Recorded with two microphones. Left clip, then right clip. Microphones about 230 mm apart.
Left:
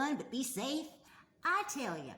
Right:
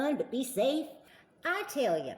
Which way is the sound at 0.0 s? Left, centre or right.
Centre.